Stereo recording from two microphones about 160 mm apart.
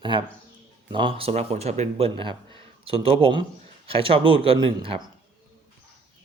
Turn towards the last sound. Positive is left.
turn(degrees=-35)  # may be behind; listen again after turning